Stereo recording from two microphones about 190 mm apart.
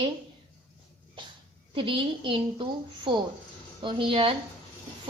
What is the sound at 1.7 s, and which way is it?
Speech, 25° right (ahead or behind).